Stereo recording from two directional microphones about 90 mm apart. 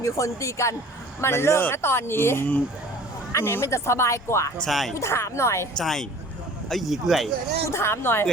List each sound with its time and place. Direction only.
0.0 s speech: 35° left (ahead or behind)
4.6 s speech: centre (ahead or behind)
4.9 s speech: 30° left (ahead or behind)
5.7 s speech: 5° left (ahead or behind)
7.7 s speech: 30° left (ahead or behind)